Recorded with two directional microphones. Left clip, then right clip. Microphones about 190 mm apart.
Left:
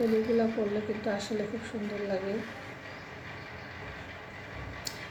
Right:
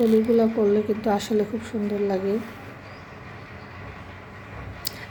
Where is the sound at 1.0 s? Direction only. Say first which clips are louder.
Right 9 dB; 50° right (ahead or behind).